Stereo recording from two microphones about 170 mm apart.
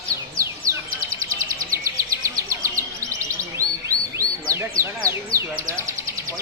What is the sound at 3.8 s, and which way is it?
Bird, 20° right (ahead or behind).